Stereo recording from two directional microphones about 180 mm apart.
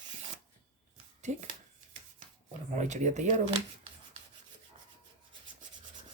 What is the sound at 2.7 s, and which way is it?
Speech, 40° right (ahead or behind).